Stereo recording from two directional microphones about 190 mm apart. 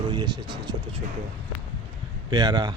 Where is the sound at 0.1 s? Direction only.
25° right (ahead or behind).